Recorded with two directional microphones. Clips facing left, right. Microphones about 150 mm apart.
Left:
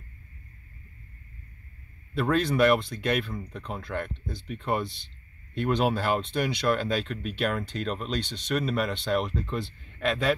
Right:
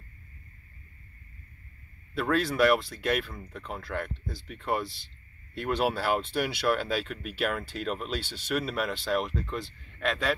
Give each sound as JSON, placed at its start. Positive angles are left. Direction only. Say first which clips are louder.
{"t": 2.1, "sound": "speech", "louder": "left 2 dB", "side_deg": 0}